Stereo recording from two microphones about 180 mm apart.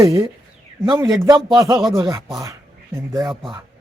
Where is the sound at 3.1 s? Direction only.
20° right (ahead or behind).